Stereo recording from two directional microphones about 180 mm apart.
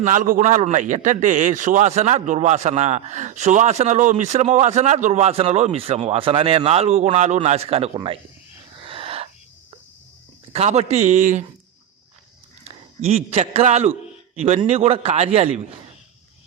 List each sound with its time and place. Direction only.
0.0 s a man's voice: 45° right (ahead or behind); by 8.2 s 30° right (ahead or behind)
8.8 s owl: 30° right (ahead or behind)
10.5 s a man's voice: 35° right (ahead or behind)
13.1 s a man's voice: 35° right (ahead or behind)